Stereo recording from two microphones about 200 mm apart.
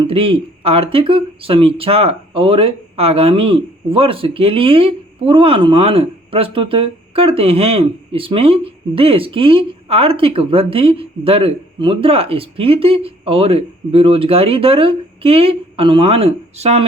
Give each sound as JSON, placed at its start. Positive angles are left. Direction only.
{"t": 0.0, "sound": "speech", "side_deg": -25}